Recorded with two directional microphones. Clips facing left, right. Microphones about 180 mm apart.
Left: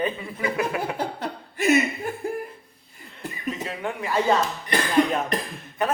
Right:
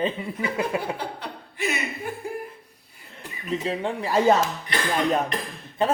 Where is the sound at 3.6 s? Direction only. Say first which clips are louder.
Right 3 dB; 30° right (ahead or behind).